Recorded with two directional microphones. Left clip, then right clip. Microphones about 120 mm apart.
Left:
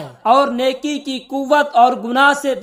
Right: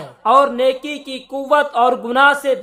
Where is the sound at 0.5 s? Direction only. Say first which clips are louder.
Right 1 dB; 35° left (ahead or behind).